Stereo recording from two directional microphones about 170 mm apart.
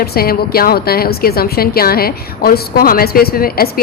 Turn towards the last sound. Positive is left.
turn(degrees=60)  # may be behind; listen again after turning